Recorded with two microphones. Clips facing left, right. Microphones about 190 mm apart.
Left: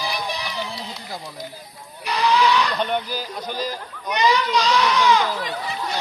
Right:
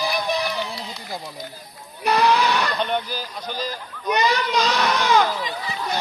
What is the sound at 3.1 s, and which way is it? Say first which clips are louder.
Speech: left 2 dB; 10° left (ahead or behind).